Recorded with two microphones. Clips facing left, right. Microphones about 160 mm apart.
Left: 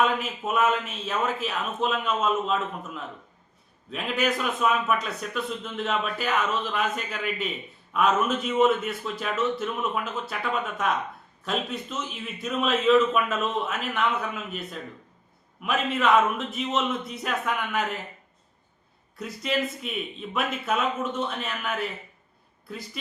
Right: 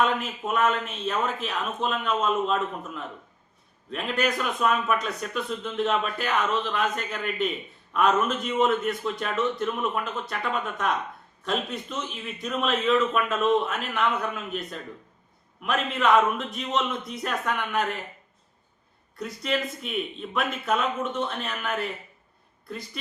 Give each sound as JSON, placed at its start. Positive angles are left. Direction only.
{"t": 0.0, "sound": "speech", "side_deg": 5}
{"t": 11.4, "sound": "speech", "side_deg": 5}
{"t": 19.1, "sound": "speech", "side_deg": 0}